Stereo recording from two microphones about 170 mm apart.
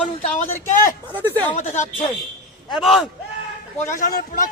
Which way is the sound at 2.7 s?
Centre (ahead or behind).